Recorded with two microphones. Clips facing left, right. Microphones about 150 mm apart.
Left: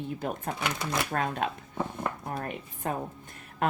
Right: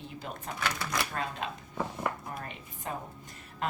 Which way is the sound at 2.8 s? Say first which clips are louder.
Left 5 dB; 50° left (ahead or behind).